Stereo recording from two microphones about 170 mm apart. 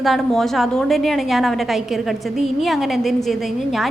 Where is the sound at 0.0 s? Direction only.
Centre (ahead or behind).